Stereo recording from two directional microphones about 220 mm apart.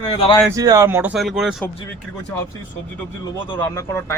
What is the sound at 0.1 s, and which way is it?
Speech, 20° left (ahead or behind).